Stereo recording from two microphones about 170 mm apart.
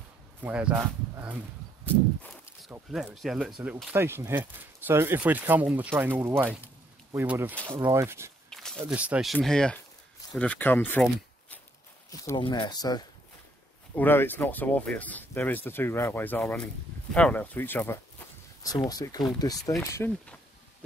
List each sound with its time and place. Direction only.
0.4 s speech: 5° right (ahead or behind)
2.7 s speech: 5° right (ahead or behind)
3.6 s speech: 15° right (ahead or behind)
8.5 s walk: 5° left (ahead or behind)
8.8 s speech: 10° right (ahead or behind); by 11.1 s 10° left (ahead or behind)
12.1 s speech: 25° left (ahead or behind)
13.9 s speech: 10° left (ahead or behind)